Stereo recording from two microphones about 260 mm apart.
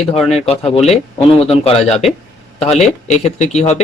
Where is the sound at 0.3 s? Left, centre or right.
Left.